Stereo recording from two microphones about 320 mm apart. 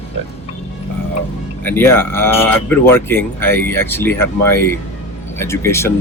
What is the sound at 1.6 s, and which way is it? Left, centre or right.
Speech, centre.